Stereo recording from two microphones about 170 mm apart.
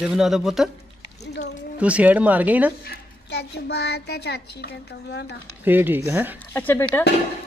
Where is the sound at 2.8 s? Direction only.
75° left (ahead or behind).